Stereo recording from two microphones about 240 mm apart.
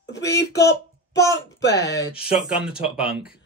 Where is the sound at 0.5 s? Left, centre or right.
Centre.